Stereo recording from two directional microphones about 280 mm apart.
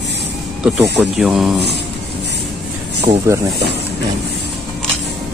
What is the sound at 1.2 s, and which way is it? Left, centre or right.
Speech, centre.